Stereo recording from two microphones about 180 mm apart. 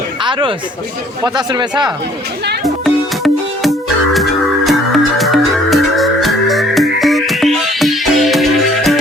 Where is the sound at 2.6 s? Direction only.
Centre (ahead or behind).